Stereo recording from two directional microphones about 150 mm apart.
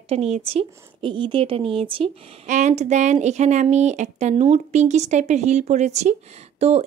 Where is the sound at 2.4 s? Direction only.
55° right (ahead or behind).